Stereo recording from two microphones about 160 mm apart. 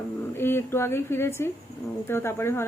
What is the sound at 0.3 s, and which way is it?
A woman's voice, 15° left (ahead or behind).